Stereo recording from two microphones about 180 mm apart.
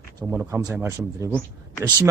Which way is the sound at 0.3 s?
5° right (ahead or behind).